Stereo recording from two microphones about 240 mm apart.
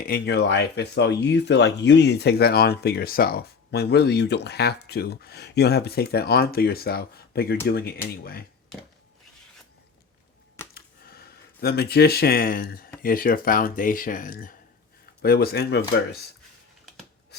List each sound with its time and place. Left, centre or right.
0.0 s speech: left
10.8 s a sound: left
13.0 s speech: left